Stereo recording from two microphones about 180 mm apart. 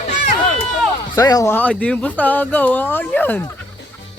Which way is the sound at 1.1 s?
20° left (ahead or behind).